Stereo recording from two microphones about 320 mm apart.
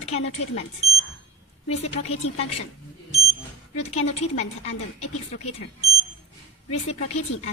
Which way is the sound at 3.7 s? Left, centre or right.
Centre.